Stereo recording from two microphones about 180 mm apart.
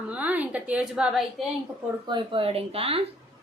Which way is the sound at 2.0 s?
25° right (ahead or behind).